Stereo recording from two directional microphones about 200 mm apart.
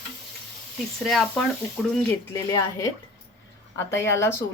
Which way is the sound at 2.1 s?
15° left (ahead or behind).